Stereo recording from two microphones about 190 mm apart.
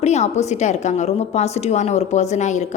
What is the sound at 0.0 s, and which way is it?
A woman's voice, 35° left (ahead or behind).